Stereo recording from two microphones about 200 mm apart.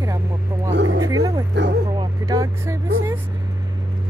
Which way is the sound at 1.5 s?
60° right (ahead or behind).